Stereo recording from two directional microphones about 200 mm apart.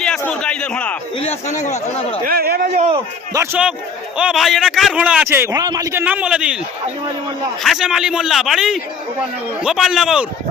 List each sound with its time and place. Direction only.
0.0 s a sound: 5° left (ahead or behind)
1.1 s speech: 30° left (ahead or behind)
2.2 s a man's voice: 50° right (ahead or behind)
2.6 s a man's voice: 30° right (ahead or behind)
3.3 s a man's voice: 10° right (ahead or behind)
7.6 s a man's voice: centre (ahead or behind)